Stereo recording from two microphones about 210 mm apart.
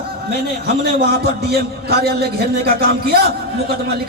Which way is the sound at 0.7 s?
45° right (ahead or behind).